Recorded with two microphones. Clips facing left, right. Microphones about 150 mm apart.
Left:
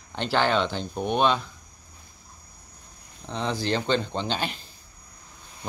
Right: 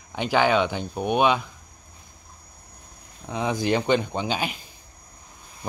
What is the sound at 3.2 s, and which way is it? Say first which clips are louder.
Speech: right 3 dB; 10° right (ahead or behind).